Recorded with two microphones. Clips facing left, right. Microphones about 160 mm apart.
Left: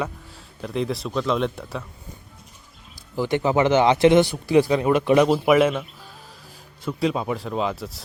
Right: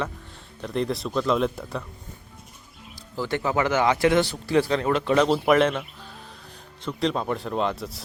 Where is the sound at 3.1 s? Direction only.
15° left (ahead or behind).